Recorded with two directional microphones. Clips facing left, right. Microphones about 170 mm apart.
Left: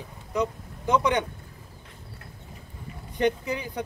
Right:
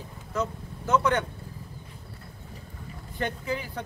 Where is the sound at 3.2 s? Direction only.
15° left (ahead or behind).